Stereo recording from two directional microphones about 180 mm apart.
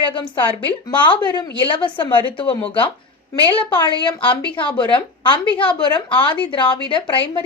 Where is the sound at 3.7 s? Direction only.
25° left (ahead or behind).